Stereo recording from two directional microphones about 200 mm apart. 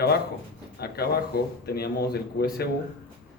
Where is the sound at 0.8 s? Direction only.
50° left (ahead or behind).